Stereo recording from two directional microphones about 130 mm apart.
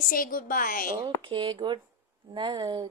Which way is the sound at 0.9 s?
35° right (ahead or behind).